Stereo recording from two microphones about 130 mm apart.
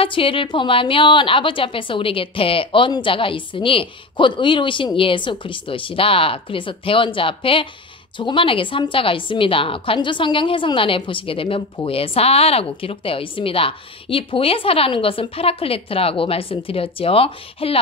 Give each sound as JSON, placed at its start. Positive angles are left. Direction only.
{"t": 0.0, "sound": "a woman's voice", "side_deg": 45}